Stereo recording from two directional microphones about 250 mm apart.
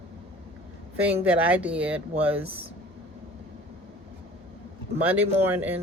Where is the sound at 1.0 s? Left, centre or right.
Centre.